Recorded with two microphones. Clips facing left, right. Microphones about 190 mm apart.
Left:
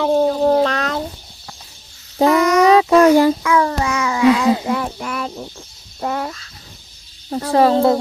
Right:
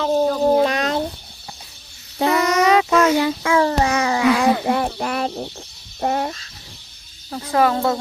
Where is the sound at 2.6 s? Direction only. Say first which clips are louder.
Left 6 dB; 35° left (ahead or behind).